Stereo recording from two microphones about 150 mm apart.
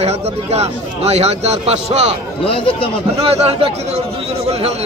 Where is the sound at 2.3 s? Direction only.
35° left (ahead or behind).